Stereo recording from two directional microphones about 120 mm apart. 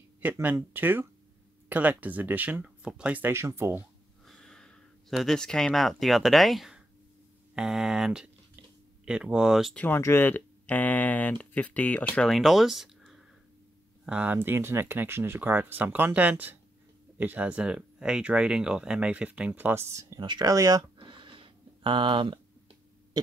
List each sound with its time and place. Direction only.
0.2 s speech: 15° right (ahead or behind)
4.3 s speech: 5° left (ahead or behind)
9.8 s speech: 20° left (ahead or behind)
12.2 s speech: centre (ahead or behind); by 20.8 s 30° right (ahead or behind)
21.0 s a sound: 45° right (ahead or behind)